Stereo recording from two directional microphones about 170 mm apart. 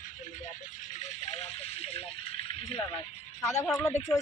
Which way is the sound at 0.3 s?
45° left (ahead or behind).